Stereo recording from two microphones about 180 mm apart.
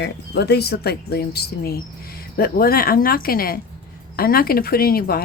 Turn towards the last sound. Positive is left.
turn(degrees=55)  # may be behind; listen again after turning